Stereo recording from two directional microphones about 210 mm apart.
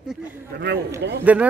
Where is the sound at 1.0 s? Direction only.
50° right (ahead or behind).